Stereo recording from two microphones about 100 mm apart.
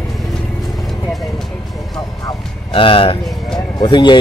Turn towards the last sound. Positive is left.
turn(degrees=50)  # may be behind; listen again after turning